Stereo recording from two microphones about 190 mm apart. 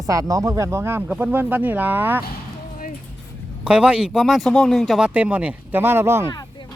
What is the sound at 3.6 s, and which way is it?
Speech, 5° right (ahead or behind).